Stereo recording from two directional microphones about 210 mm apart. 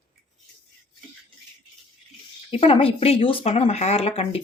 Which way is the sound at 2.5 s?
25° left (ahead or behind).